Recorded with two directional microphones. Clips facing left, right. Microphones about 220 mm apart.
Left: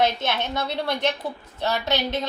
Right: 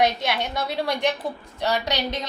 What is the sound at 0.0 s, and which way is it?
A woman's voice, 15° right (ahead or behind).